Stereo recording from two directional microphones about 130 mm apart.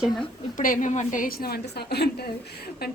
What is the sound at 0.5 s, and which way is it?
Speech, 90° left.